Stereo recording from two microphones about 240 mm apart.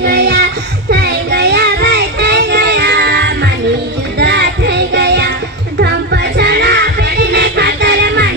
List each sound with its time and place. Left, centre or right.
0.0 s child singing: right
4.2 s music: right